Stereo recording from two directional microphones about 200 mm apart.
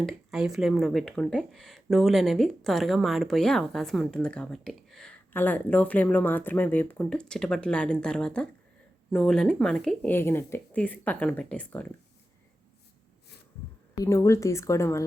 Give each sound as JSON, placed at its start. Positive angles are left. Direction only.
{"t": 0.0, "sound": "speech", "side_deg": 0}
{"t": 14.0, "sound": "speech", "side_deg": 15}